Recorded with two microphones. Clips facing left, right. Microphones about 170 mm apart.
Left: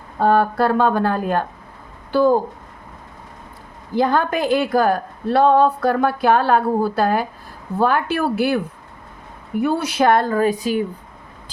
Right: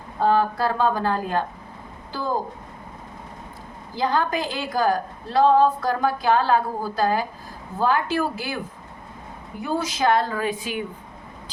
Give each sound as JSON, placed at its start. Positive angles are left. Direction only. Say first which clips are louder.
{"t": 0.2, "sound": "a woman's voice", "louder": "left 4 dB", "side_deg": 55}
{"t": 3.9, "sound": "a woman's voice", "louder": "left 5 dB", "side_deg": 55}
{"t": 9.6, "sound": "a woman's voice", "louder": "left 6 dB", "side_deg": 65}